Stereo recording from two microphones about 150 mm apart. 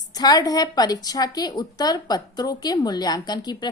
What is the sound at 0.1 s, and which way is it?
A woman's voice, 25° left (ahead or behind).